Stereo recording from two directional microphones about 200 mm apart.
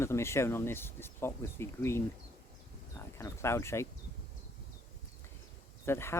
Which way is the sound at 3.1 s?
15° left (ahead or behind).